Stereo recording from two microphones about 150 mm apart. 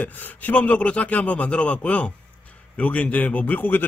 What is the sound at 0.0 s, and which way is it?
A man's voice, 10° left (ahead or behind).